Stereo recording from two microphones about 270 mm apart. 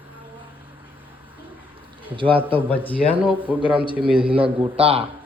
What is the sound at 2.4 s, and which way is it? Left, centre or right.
Speech, centre.